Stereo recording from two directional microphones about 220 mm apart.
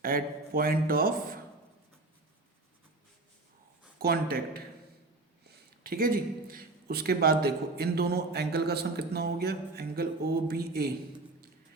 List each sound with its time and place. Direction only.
0.0 s a man's voice: 40° right (ahead or behind)
3.9 s speech: 45° right (ahead or behind)